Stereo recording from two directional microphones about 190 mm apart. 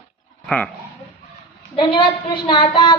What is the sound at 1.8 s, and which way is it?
Speech, 25° left (ahead or behind).